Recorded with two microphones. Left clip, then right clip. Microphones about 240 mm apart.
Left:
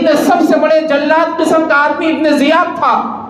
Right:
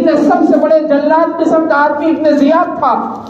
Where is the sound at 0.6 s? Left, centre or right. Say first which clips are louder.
Right 1 dB; left.